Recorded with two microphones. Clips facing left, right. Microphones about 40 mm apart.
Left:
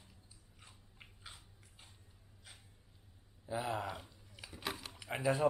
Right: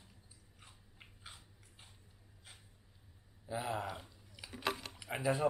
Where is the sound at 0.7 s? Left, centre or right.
Centre.